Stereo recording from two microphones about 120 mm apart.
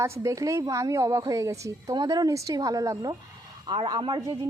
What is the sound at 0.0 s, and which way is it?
A woman's voice, 25° right (ahead or behind).